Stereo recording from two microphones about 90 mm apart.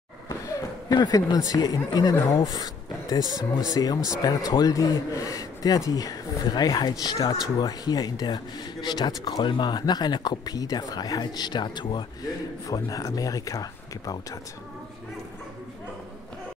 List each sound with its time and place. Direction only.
0.3 s a sound: 40° left (ahead or behind)
0.9 s speech: 50° left (ahead or behind)
12.6 s speech: 40° left (ahead or behind)